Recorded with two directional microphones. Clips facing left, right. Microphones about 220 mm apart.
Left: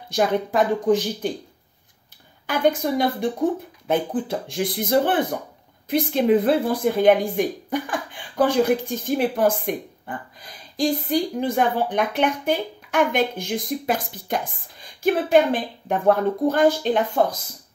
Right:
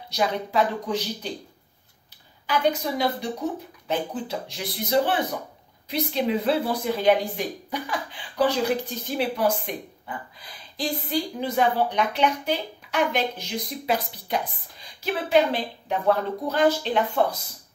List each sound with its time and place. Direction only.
0.1 s speech: 50° left (ahead or behind)
2.4 s speech: 50° left (ahead or behind)